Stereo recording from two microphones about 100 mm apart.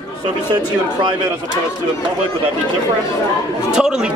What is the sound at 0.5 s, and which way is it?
Speech, 45° right (ahead or behind).